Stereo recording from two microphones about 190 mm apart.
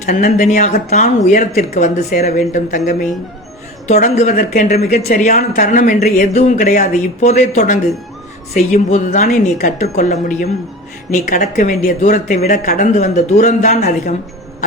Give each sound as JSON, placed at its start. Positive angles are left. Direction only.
{"t": 0.0, "sound": "speech", "side_deg": 45}
{"t": 2.7, "sound": "speech", "side_deg": 55}
{"t": 3.9, "sound": "speech", "side_deg": 40}
{"t": 5.0, "sound": "speech", "side_deg": 40}
{"t": 12.7, "sound": "speech", "side_deg": 40}